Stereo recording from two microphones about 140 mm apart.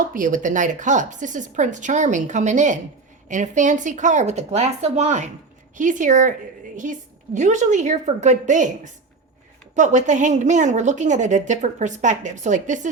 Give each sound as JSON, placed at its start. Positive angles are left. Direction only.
{"t": 0.1, "sound": "a woman's voice", "side_deg": -70}
{"t": 7.3, "sound": "a woman's voice", "side_deg": -60}